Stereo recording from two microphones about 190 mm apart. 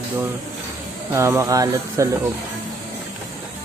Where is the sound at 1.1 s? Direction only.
15° right (ahead or behind).